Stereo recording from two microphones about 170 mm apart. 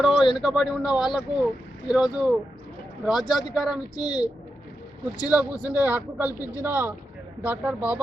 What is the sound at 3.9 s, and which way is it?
Speech, 25° left (ahead or behind).